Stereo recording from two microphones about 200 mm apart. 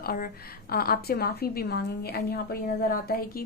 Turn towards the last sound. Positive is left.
turn(degrees=50)  # may be behind; listen again after turning